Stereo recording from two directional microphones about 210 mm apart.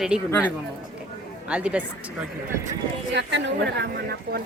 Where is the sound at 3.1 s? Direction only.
55° right (ahead or behind).